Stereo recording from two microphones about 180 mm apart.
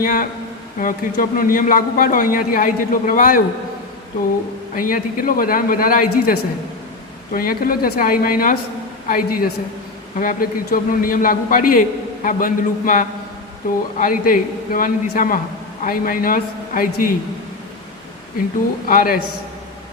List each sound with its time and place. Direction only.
0.0 s a man's voice: 50° left (ahead or behind)
4.7 s a man's voice: 50° left (ahead or behind)
18.9 s a man's voice: 55° left (ahead or behind)